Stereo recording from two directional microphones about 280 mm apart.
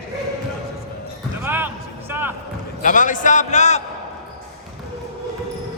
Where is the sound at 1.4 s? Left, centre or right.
Centre.